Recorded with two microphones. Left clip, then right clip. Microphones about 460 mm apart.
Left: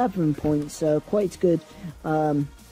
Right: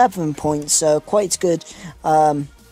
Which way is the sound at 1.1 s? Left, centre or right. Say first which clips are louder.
Right 5 dB; centre.